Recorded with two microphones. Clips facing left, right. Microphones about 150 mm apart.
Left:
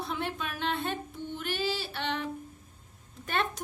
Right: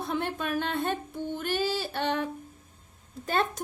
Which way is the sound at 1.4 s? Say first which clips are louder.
Right 3 dB; 45° right (ahead or behind).